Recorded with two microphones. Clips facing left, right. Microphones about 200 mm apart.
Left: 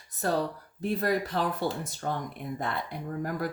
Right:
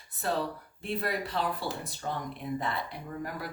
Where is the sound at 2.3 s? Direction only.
55° left (ahead or behind).